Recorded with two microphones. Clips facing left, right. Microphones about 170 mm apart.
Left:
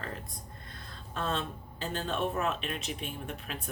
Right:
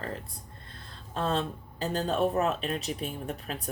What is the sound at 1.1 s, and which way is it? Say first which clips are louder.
Speech: right 4 dB; 35° right (ahead or behind).